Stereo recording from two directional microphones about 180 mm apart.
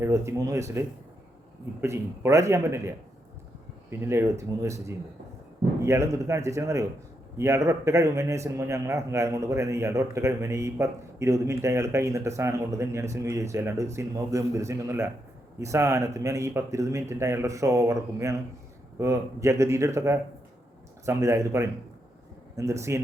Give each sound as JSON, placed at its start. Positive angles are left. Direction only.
{"t": 0.0, "sound": "a man's voice", "side_deg": -15}